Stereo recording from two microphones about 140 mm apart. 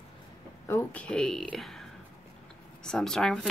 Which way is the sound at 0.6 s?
15° left (ahead or behind).